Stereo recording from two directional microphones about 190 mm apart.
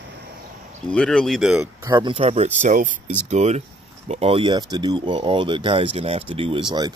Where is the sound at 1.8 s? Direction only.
20° right (ahead or behind).